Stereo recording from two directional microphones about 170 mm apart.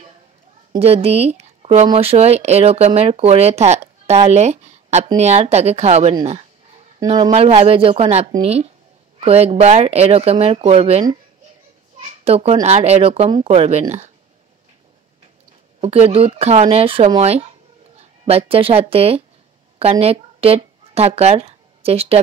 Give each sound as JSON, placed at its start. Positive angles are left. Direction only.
{"t": 0.7, "sound": "a woman's voice", "side_deg": -35}
{"t": 7.2, "sound": "speech", "side_deg": -35}
{"t": 12.1, "sound": "a sound", "side_deg": -35}
{"t": 12.6, "sound": "speech", "side_deg": -40}
{"t": 15.8, "sound": "speech", "side_deg": -35}